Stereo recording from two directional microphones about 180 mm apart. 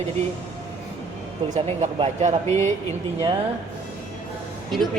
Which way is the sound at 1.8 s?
35° right (ahead or behind).